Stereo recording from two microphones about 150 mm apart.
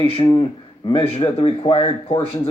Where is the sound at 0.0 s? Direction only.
40° left (ahead or behind).